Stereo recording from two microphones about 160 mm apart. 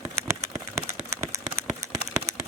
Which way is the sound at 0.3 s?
20° right (ahead or behind).